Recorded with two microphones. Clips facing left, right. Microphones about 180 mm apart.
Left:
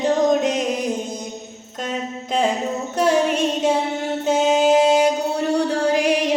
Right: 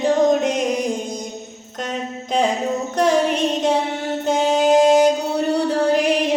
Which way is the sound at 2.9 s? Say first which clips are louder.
Even; 5° left (ahead or behind).